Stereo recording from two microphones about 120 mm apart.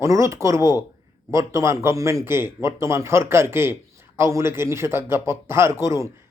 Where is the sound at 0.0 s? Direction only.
25° right (ahead or behind).